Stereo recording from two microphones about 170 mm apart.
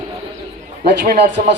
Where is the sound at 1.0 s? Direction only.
50° right (ahead or behind).